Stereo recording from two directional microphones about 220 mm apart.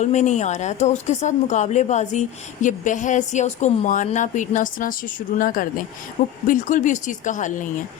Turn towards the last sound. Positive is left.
turn(degrees=35)  # may be behind; listen again after turning